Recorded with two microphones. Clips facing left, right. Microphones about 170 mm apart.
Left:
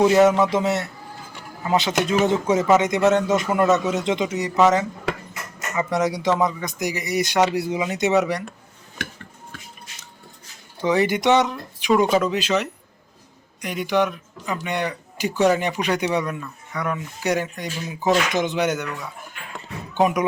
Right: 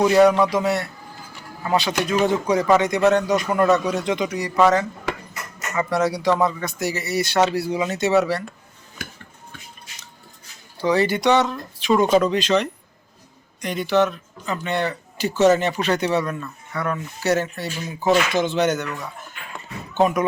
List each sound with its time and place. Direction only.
0.3 s a man's voice: 25° left (ahead or behind)
10.8 s speech: 20° left (ahead or behind)